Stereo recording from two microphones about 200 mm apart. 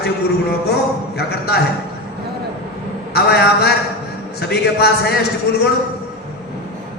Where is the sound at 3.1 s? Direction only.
55° left (ahead or behind).